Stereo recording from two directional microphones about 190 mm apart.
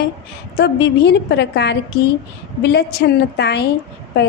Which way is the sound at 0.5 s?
65° left (ahead or behind).